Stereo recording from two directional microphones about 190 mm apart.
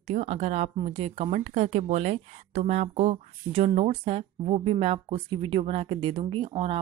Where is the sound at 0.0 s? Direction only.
35° right (ahead or behind).